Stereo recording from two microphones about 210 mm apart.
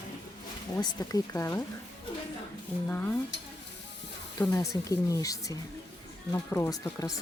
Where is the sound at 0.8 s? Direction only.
20° left (ahead or behind).